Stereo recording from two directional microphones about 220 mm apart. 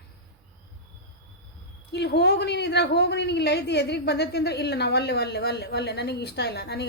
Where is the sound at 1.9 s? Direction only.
50° left (ahead or behind).